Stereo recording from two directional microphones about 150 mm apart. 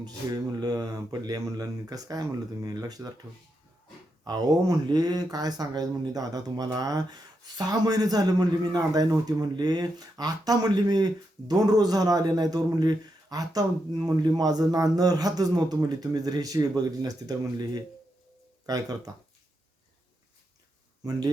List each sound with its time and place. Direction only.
0.0 s speech: 25° right (ahead or behind)
4.2 s speech: 25° right (ahead or behind)
21.0 s speech: 25° right (ahead or behind)